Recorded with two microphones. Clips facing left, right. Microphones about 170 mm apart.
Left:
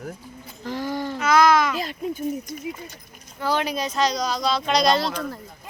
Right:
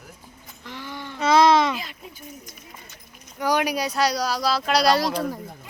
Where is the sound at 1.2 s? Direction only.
30° right (ahead or behind).